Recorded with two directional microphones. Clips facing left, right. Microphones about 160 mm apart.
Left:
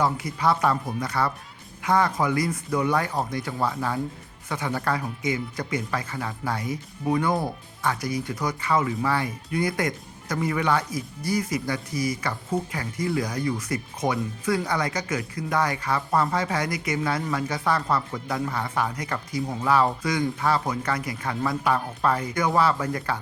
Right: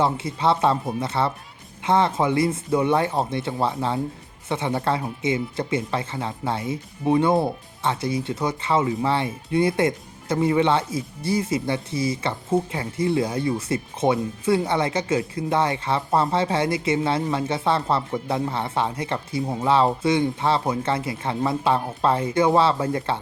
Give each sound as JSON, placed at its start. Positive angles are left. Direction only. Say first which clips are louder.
{"t": 0.0, "sound": "speech", "louder": "right 2 dB", "side_deg": -25}